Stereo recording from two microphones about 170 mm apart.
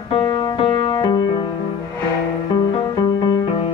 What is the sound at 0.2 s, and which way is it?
Music, 25° left (ahead or behind).